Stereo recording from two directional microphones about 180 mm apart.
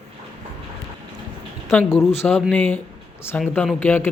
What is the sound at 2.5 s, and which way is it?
Speech, 10° left (ahead or behind).